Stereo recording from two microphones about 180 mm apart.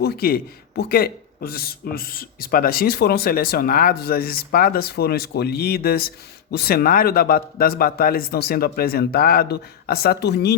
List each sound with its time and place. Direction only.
0.0 s a man's voice: 60° left (ahead or behind)